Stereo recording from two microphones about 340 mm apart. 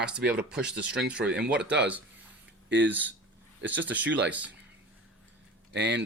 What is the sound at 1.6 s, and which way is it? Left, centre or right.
Speech, right.